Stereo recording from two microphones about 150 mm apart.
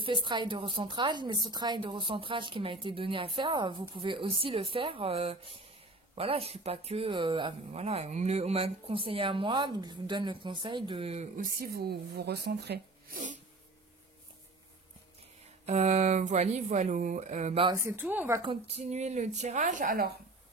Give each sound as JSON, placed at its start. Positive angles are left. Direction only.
{"t": 0.0, "sound": "a woman's voice", "side_deg": -35}
{"t": 11.3, "sound": "speech", "side_deg": -75}
{"t": 15.6, "sound": "speech", "side_deg": -45}
{"t": 17.7, "sound": "speech", "side_deg": -15}
{"t": 18.4, "sound": "speech", "side_deg": -40}